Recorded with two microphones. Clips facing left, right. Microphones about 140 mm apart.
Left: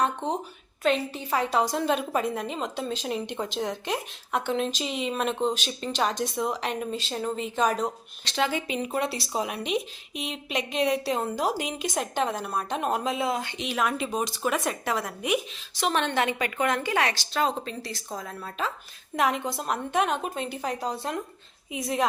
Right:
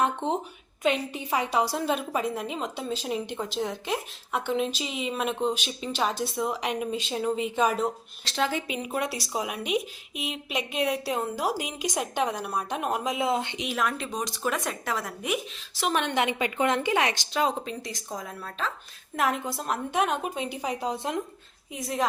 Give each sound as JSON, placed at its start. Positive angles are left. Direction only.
{"t": 0.8, "sound": "a woman's voice", "side_deg": -15}
{"t": 13.1, "sound": "speech", "side_deg": -20}
{"t": 13.7, "sound": "a woman's voice", "side_deg": 5}
{"t": 18.3, "sound": "a woman's voice", "side_deg": 5}
{"t": 21.7, "sound": "a woman's voice", "side_deg": 0}